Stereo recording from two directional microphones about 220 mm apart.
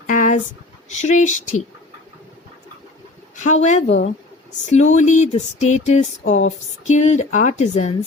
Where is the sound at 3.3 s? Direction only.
35° left (ahead or behind).